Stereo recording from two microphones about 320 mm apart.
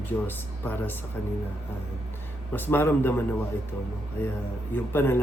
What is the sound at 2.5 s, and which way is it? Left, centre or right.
Speech, centre.